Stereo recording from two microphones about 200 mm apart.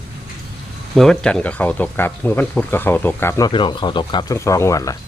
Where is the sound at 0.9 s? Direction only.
5° left (ahead or behind).